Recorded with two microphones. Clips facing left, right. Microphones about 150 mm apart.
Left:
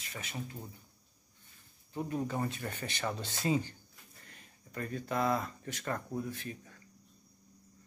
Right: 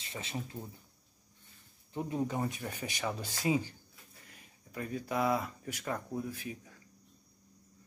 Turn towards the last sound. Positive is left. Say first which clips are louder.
# even
turn(degrees=-10)  # may be behind; listen again after turning